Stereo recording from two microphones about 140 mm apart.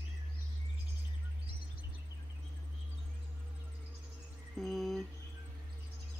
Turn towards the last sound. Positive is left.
turn(degrees=0)  # may be behind; listen again after turning